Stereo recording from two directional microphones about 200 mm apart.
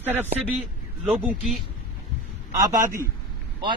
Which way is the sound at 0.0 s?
10° right (ahead or behind).